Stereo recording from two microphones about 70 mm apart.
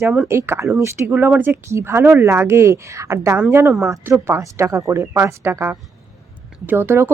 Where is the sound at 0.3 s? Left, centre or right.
Right.